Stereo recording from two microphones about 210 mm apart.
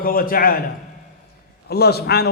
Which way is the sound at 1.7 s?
50° left (ahead or behind).